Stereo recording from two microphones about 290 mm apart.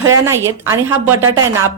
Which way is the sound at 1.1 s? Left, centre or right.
Right.